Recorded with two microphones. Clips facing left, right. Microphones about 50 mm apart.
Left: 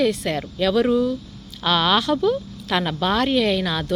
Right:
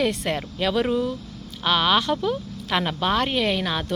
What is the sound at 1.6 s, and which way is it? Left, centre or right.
A woman's voice, centre.